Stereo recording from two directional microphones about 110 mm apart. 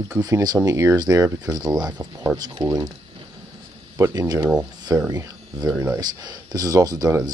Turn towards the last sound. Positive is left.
turn(degrees=-35)  # may be behind; listen again after turning